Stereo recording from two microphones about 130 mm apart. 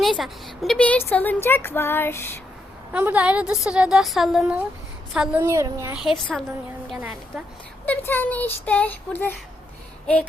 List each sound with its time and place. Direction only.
0.0 s a woman's voice: centre (ahead or behind); by 2.4 s 20° left (ahead or behind)
2.9 s a woman's voice: 10° right (ahead or behind)
5.4 s a woman's voice: 25° right (ahead or behind)
5.9 s a woman's voice: 5° right (ahead or behind)
7.9 s a woman's voice: 15° left (ahead or behind)